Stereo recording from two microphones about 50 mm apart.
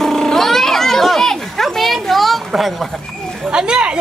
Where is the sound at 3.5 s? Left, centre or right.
Centre.